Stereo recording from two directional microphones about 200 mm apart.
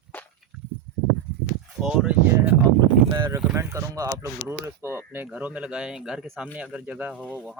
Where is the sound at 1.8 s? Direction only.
5° right (ahead or behind).